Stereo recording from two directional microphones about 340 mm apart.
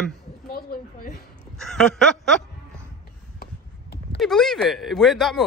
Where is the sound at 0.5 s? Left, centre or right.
Left.